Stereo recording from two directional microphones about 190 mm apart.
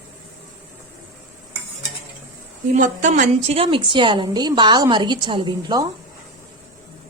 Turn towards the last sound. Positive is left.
turn(degrees=-20)  # may be behind; listen again after turning